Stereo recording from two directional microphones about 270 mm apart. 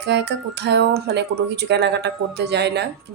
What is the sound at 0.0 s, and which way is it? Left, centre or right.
Speech, right.